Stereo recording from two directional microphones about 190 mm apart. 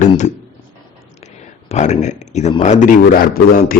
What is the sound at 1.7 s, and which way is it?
Speech, 40° left (ahead or behind).